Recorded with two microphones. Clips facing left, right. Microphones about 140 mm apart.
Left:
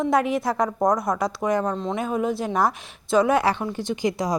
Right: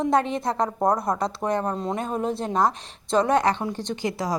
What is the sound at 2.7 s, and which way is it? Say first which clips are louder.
Speech: left 2 dB; 5° left (ahead or behind).